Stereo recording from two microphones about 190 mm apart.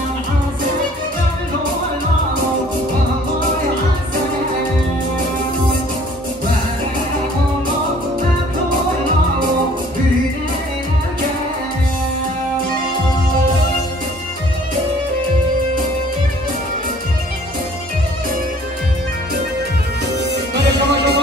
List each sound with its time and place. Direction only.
20.2 s music: 60° right (ahead or behind)